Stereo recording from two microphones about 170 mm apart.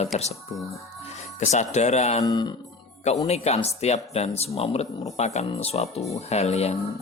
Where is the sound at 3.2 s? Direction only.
40° left (ahead or behind).